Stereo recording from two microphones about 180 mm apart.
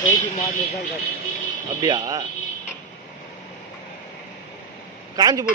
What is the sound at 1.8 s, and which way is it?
Speech, 20° right (ahead or behind).